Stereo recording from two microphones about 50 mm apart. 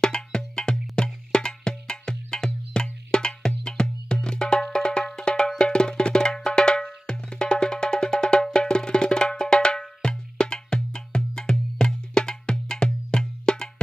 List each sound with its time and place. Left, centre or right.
0.0 s music: centre
5.6 s percussion: centre